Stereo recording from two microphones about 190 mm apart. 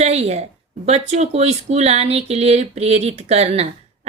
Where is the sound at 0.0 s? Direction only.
35° right (ahead or behind).